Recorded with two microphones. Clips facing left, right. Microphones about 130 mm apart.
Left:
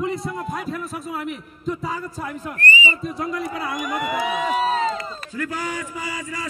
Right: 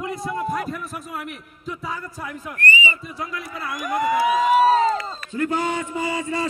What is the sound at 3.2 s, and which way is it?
Speech, centre (ahead or behind).